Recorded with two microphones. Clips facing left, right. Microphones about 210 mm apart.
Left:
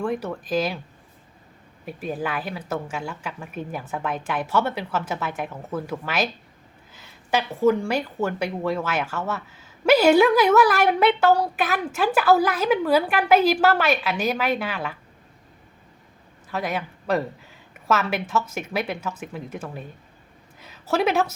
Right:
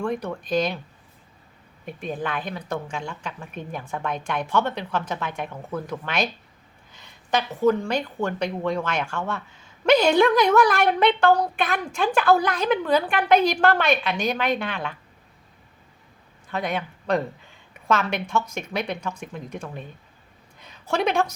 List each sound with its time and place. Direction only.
0.0 s a woman's voice: 5° left (ahead or behind)
1.8 s a woman's voice: 5° left (ahead or behind)
16.5 s a woman's voice: 5° left (ahead or behind)